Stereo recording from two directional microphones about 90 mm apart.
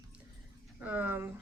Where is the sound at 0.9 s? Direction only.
20° right (ahead or behind).